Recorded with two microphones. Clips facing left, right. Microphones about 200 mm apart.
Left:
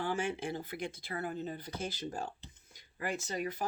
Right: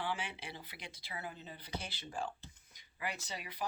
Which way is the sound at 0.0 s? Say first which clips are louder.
Left 7 dB; 45° left (ahead or behind).